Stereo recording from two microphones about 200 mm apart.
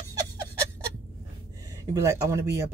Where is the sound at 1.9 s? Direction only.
15° right (ahead or behind).